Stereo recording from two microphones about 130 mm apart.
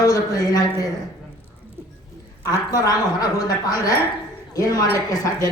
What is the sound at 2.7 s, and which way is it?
A man's voice, 30° left (ahead or behind).